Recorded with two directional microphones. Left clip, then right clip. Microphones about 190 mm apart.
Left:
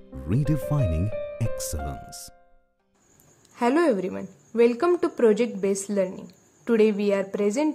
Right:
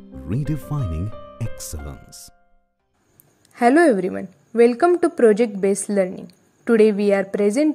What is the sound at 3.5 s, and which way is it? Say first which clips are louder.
A woman's voice: right 7 dB; 20° right (ahead or behind).